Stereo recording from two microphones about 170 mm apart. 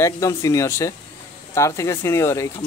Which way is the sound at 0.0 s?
15° left (ahead or behind).